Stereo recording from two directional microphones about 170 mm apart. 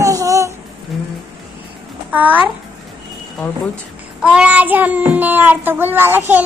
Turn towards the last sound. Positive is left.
turn(degrees=-15)  # may be behind; listen again after turning